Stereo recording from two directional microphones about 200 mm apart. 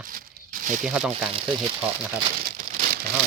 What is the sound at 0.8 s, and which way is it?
Speech, 5° right (ahead or behind).